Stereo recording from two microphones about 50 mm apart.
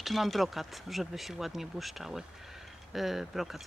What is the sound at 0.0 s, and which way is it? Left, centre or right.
Speech, centre.